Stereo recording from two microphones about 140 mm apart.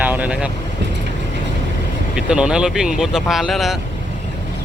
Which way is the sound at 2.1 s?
5° right (ahead or behind).